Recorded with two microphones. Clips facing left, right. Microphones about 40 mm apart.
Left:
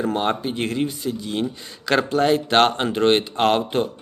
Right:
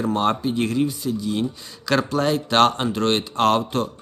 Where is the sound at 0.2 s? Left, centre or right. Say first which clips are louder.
Right 2 dB; left.